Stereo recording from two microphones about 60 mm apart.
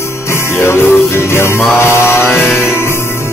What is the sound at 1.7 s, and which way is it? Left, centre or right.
Mantra, left.